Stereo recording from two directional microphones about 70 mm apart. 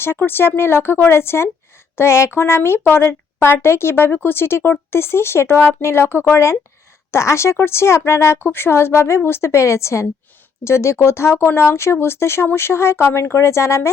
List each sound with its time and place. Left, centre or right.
0.2 s speech: left